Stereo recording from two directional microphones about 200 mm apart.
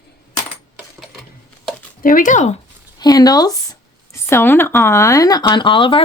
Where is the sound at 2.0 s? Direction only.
40° left (ahead or behind).